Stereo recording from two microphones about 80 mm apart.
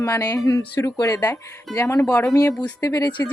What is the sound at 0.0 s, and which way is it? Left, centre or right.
A woman's voice, left.